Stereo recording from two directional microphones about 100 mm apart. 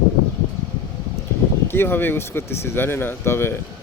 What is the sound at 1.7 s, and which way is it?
Speech, 20° left (ahead or behind).